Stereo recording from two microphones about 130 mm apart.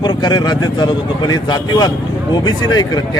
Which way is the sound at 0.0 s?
35° left (ahead or behind).